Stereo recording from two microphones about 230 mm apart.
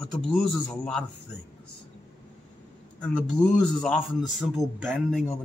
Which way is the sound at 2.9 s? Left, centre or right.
Centre.